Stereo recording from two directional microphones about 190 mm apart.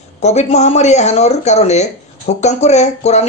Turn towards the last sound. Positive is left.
turn(degrees=35)  # may be behind; listen again after turning